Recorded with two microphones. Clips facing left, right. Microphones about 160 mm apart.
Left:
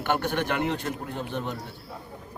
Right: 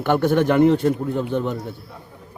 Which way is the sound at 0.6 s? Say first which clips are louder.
Right 13 dB; 35° right (ahead or behind).